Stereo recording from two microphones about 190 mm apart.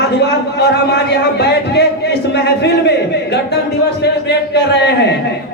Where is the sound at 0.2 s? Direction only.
60° left (ahead or behind).